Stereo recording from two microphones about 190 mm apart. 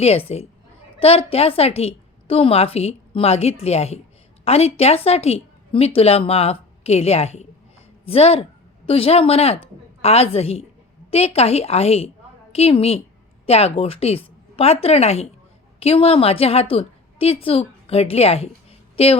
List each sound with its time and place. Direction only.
0.0 s a woman's voice: 30° left (ahead or behind)